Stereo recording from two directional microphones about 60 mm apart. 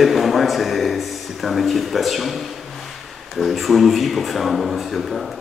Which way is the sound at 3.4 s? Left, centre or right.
Centre.